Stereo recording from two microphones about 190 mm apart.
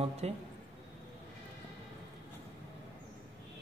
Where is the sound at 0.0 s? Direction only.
35° right (ahead or behind).